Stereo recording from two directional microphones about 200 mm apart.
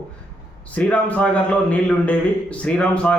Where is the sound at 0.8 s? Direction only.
5° left (ahead or behind).